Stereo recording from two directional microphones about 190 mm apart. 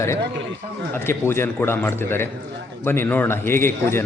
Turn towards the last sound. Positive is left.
turn(degrees=15)  # may be behind; listen again after turning